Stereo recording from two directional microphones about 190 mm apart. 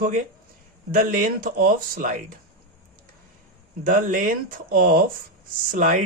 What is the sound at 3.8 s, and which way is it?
Speech, 45° right (ahead or behind).